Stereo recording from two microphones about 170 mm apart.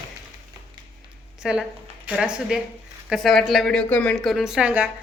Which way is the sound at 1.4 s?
5° right (ahead or behind).